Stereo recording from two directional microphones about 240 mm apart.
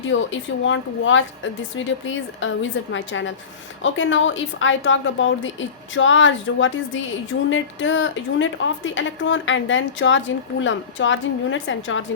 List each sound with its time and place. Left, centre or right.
0.0 s a woman's voice: left